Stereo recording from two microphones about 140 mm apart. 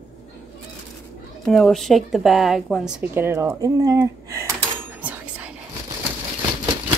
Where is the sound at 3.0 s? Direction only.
15° right (ahead or behind).